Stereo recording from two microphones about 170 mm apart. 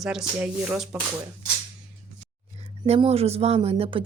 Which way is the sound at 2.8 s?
35° right (ahead or behind).